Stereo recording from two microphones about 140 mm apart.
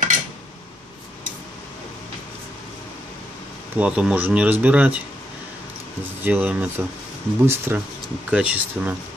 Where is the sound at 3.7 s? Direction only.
10° right (ahead or behind).